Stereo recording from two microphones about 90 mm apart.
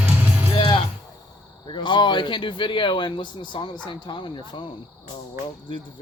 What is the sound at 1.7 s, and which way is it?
Speech, 65° left (ahead or behind).